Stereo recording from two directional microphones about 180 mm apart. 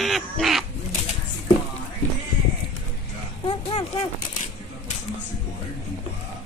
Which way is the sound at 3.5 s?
30° left (ahead or behind).